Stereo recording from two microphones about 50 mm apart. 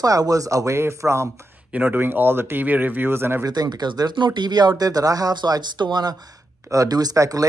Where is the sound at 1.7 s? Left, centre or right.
Right.